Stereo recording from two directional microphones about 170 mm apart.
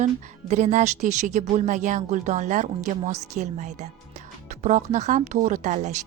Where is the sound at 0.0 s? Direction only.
45° right (ahead or behind).